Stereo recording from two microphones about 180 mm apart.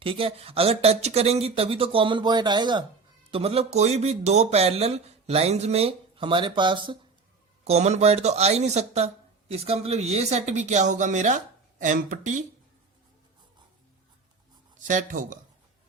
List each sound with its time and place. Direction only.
0.0 s speech: 30° right (ahead or behind)
7.6 s speech: 35° right (ahead or behind)
14.8 s speech: 45° right (ahead or behind)